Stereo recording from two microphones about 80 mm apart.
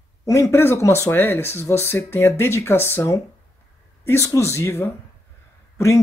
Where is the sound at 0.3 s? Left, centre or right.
Left.